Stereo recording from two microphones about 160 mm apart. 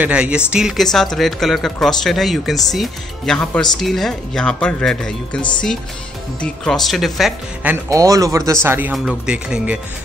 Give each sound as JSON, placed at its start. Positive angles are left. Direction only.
{"t": 0.0, "sound": "speech", "side_deg": -5}
{"t": 6.4, "sound": "speech", "side_deg": 5}
{"t": 7.7, "sound": "speech", "side_deg": -20}
{"t": 8.9, "sound": "speech", "side_deg": -5}